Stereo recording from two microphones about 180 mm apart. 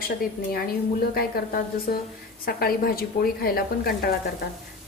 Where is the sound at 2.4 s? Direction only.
55° left (ahead or behind).